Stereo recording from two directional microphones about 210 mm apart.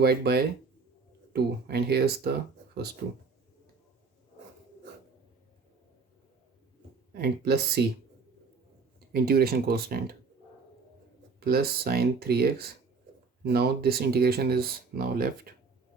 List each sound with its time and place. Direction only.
0.0 s speech: 50° right (ahead or behind)
7.1 s speech: 50° right (ahead or behind)
9.2 s speech: 45° right (ahead or behind)
11.3 s speech: 45° right (ahead or behind)